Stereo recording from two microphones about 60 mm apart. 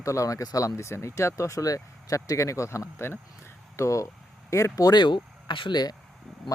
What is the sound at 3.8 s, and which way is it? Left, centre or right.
Speech, left.